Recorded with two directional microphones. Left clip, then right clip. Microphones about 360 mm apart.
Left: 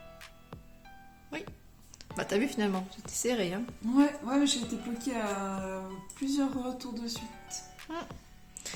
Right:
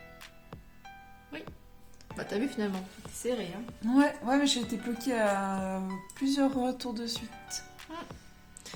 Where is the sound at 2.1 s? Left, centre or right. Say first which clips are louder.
Left 3 dB; centre.